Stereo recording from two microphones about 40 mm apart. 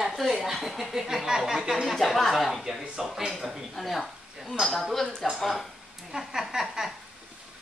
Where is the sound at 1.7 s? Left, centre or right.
Centre.